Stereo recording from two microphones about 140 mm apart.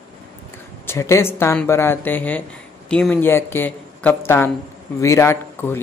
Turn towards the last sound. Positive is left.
turn(degrees=15)  # may be behind; listen again after turning